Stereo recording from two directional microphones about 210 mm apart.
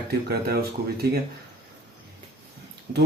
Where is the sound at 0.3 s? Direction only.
50° right (ahead or behind).